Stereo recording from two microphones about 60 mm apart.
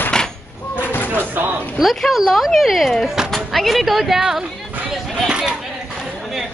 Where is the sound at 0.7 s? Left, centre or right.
Left.